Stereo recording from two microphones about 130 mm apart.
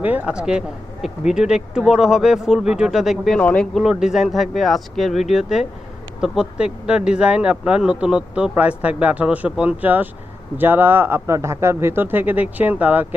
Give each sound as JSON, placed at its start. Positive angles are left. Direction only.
{"t": 0.0, "sound": "speech", "side_deg": -10}
{"t": 3.4, "sound": "speech", "side_deg": 10}
{"t": 3.8, "sound": "speech", "side_deg": -5}